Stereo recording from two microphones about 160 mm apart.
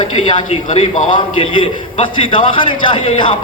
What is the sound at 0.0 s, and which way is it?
A man's voice, 35° left (ahead or behind).